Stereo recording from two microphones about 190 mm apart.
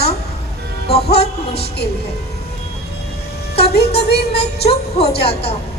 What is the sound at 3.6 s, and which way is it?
A woman's voice, 60° left (ahead or behind).